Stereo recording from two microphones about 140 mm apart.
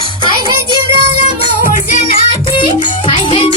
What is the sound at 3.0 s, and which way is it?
Music, 40° left (ahead or behind).